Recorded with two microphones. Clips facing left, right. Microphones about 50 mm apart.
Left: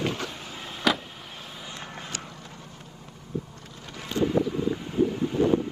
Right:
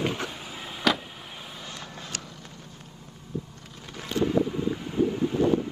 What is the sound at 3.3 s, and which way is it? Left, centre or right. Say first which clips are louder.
Vehicle: left 2 dB; left.